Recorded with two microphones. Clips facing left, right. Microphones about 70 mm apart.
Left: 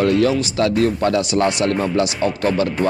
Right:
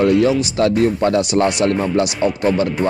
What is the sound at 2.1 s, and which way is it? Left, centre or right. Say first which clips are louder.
Speech: right 2 dB; centre.